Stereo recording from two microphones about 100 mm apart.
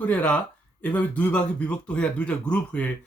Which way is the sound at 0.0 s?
15° left (ahead or behind).